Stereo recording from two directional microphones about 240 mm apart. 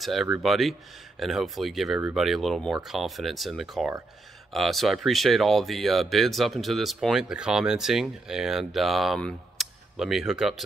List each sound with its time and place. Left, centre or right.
0.0 s speech: centre